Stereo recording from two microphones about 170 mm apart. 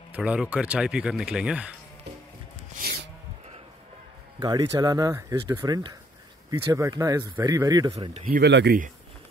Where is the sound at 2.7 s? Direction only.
65° right (ahead or behind).